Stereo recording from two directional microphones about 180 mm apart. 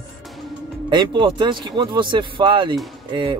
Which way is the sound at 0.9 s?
25° right (ahead or behind).